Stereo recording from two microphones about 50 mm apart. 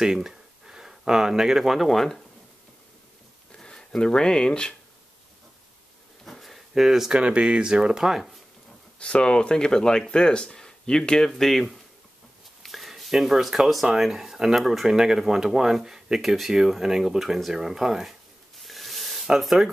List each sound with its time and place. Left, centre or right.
0.0 s speech: centre
3.5 s speech: centre
6.2 s a sound: centre
6.7 s speech: centre
7.1 s speech: right; by 8.4 s centre
9.0 s speech: centre
18.6 s a sound: centre
19.2 s speech: centre